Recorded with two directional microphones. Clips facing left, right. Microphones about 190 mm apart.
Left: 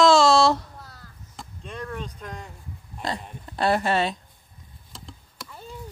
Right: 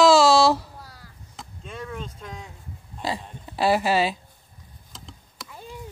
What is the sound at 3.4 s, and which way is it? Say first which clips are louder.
Speech: right 1 dB; 5° right (ahead or behind).